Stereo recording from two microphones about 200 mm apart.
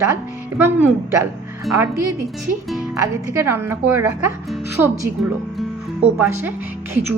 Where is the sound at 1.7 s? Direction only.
Centre (ahead or behind).